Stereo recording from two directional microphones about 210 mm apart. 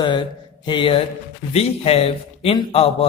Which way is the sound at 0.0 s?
20° left (ahead or behind).